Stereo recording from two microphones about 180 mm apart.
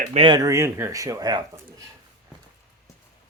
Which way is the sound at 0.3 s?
15° right (ahead or behind).